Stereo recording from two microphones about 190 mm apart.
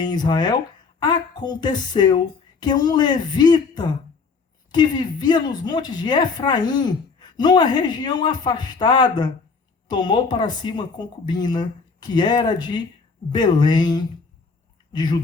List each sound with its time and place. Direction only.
0.0 s a woman's voice: 20° left (ahead or behind)